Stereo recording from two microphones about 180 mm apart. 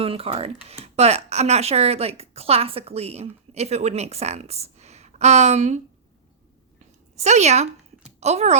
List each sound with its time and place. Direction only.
0.0 s speech: 35° right (ahead or behind)
6.7 s a sound: 40° right (ahead or behind)
8.2 s speech: 35° right (ahead or behind)